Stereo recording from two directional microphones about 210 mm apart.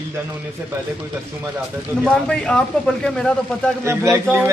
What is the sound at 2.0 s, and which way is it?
A man's voice, 5° left (ahead or behind).